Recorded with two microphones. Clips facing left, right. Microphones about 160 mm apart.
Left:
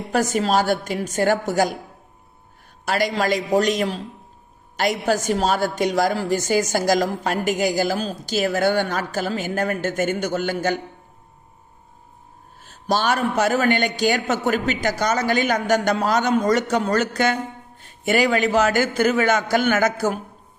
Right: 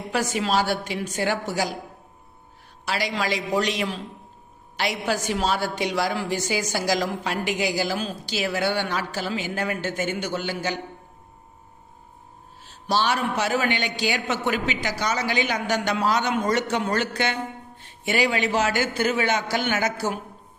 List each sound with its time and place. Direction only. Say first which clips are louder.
0.1 s a woman's voice: left 4 dB; 45° left (ahead or behind)
2.8 s a woman's voice: left 5 dB; 50° left (ahead or behind)
12.6 s a woman's voice: left 2 dB; 50° left (ahead or behind)